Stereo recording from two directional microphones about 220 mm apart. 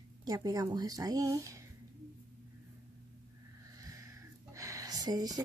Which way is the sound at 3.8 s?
15° right (ahead or behind).